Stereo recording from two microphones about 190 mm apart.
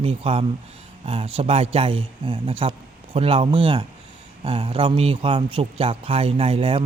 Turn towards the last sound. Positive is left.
turn(degrees=-30)  # may be behind; listen again after turning